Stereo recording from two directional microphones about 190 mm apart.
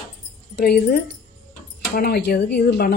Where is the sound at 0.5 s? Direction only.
55° left (ahead or behind).